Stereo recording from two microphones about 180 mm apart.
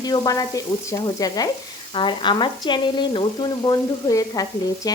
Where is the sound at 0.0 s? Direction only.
20° left (ahead or behind).